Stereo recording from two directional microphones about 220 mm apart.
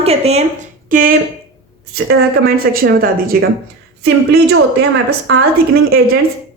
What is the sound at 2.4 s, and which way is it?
A woman's voice, 40° right (ahead or behind).